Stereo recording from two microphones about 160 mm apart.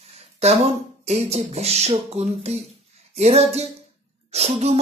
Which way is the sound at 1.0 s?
45° right (ahead or behind).